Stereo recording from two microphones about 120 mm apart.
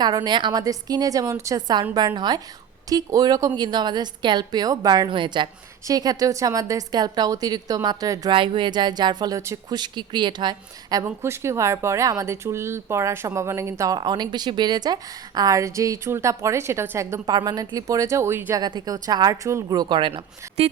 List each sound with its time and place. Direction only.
0.0 s a woman's voice: 35° right (ahead or behind)
8.3 s a woman's voice: 45° right (ahead or behind)
9.4 s a woman's voice: 25° right (ahead or behind)
9.7 s a woman's voice: 40° right (ahead or behind); by 18.6 s 20° right (ahead or behind)
18.6 s a woman's voice: 35° right (ahead or behind)